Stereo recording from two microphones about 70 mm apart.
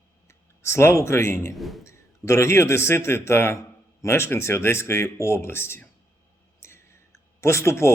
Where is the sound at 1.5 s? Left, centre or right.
Centre.